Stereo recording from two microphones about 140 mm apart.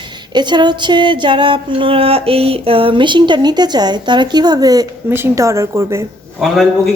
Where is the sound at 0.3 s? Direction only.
30° right (ahead or behind).